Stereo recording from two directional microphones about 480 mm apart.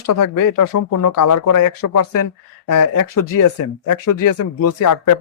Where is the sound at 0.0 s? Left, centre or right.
Left.